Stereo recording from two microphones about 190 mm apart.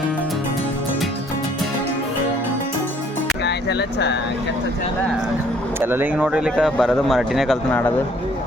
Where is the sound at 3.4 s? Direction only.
65° left (ahead or behind).